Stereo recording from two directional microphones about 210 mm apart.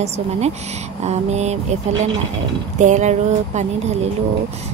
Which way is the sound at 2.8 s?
35° right (ahead or behind).